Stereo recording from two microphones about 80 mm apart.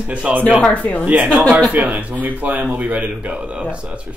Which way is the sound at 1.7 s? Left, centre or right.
Centre.